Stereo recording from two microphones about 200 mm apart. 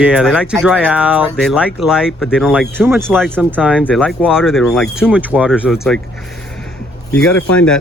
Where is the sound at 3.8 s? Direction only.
5° left (ahead or behind).